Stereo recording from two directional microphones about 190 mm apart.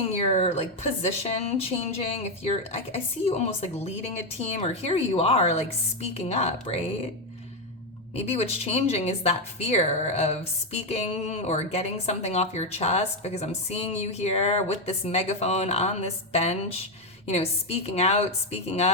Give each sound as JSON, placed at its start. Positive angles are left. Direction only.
{"t": 0.3, "sound": "a woman's voice", "side_deg": 35}
{"t": 8.1, "sound": "a woman's voice", "side_deg": 35}